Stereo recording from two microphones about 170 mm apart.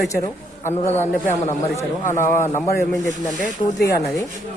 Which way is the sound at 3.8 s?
70° left (ahead or behind).